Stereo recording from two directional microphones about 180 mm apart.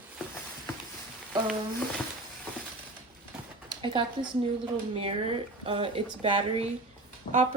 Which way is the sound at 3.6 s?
25° right (ahead or behind).